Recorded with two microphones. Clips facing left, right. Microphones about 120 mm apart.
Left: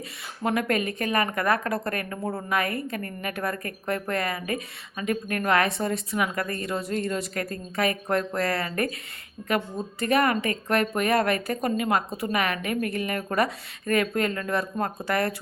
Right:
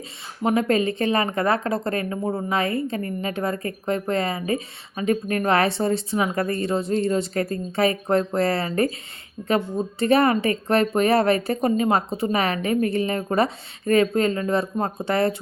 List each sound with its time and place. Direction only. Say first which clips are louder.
0.4 s speech: right 5 dB; 25° right (ahead or behind)